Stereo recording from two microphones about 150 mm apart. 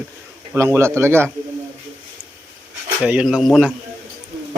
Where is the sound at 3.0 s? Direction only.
5° right (ahead or behind).